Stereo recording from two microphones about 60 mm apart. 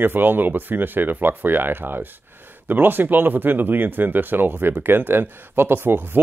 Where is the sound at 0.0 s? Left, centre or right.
Right.